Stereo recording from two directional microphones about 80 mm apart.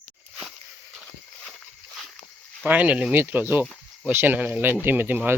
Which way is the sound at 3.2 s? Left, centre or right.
Right.